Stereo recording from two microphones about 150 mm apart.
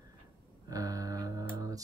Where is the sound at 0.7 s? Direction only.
25° right (ahead or behind).